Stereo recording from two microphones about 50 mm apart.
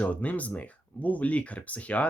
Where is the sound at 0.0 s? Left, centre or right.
Left.